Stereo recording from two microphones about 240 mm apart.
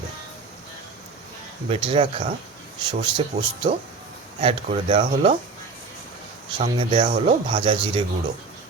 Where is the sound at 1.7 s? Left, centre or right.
Right.